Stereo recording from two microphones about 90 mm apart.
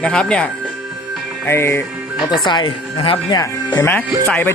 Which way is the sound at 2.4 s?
60° left (ahead or behind).